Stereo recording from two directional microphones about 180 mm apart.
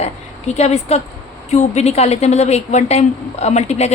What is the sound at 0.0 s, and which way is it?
A woman's voice, 35° left (ahead or behind).